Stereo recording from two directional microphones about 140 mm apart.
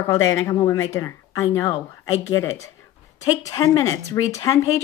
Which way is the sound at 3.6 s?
25° left (ahead or behind).